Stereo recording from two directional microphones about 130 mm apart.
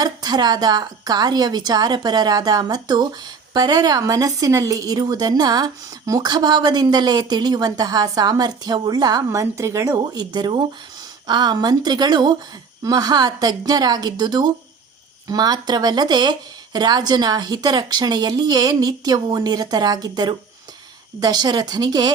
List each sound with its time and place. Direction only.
0.0 s a woman's voice: 30° right (ahead or behind)
10.0 s a woman's voice: 35° right (ahead or behind)